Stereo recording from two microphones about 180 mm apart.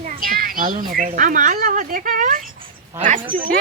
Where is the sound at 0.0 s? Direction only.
50° right (ahead or behind).